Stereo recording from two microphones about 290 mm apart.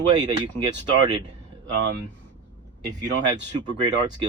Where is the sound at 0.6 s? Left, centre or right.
Centre.